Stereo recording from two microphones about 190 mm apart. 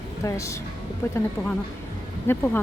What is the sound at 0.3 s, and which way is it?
Speech, 15° left (ahead or behind).